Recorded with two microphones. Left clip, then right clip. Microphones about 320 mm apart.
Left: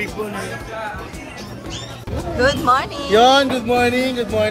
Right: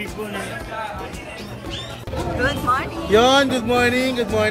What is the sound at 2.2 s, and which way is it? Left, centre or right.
Speech, centre.